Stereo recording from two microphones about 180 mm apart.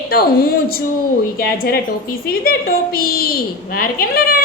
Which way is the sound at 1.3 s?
55° left (ahead or behind).